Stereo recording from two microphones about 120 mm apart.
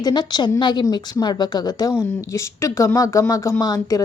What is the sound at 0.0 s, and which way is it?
A woman's voice, 35° left (ahead or behind).